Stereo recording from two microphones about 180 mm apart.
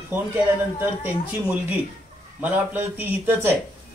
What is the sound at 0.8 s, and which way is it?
Speech, 10° right (ahead or behind).